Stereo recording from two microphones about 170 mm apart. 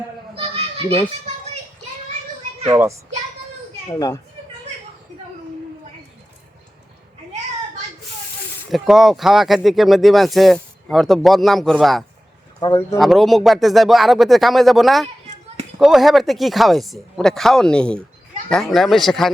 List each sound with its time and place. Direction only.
0.3 s children playing: 35° right (ahead or behind)
3.9 s a child's voice: 20° left (ahead or behind)
8.7 s speech: centre (ahead or behind)
12.5 s speech: 20° left (ahead or behind)
13.0 s speech: centre (ahead or behind)